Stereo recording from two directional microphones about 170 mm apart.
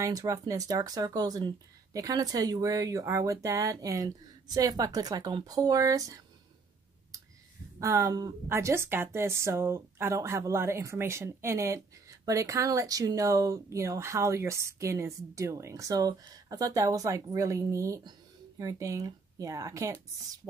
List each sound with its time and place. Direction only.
0.0 s speech: 20° right (ahead or behind)
7.8 s speech: 15° right (ahead or behind)